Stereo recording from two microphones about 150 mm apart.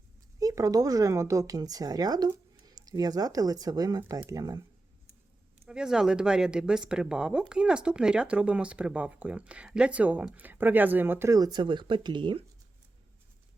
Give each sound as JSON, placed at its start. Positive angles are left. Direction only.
{"t": 0.3, "sound": "speech", "side_deg": -20}
{"t": 5.6, "sound": "speech", "side_deg": -5}